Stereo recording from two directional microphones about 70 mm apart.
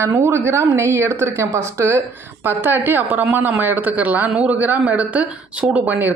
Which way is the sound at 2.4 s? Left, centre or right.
Right.